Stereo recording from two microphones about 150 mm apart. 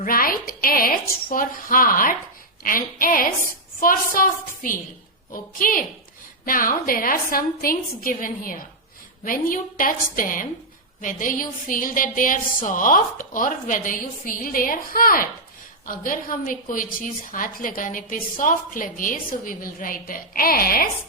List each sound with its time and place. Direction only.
0.0 s a woman's voice: 75° left (ahead or behind)